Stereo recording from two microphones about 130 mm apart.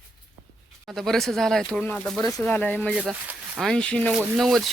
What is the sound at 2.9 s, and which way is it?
Speech, 10° right (ahead or behind).